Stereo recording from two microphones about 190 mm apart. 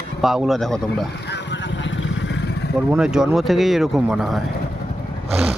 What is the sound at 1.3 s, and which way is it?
Vehicle, 65° left (ahead or behind).